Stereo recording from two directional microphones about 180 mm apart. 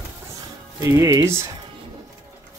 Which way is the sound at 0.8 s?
20° right (ahead or behind).